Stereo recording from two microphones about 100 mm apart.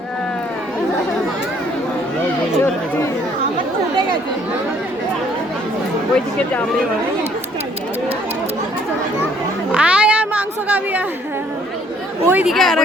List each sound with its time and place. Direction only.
9.7 s a sound: 10° right (ahead or behind)
12.2 s speech: 20° right (ahead or behind)
12.5 s speech: centre (ahead or behind)